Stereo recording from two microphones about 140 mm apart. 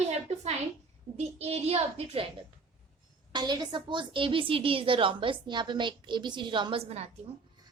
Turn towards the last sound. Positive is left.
turn(degrees=-45)  # may be behind; listen again after turning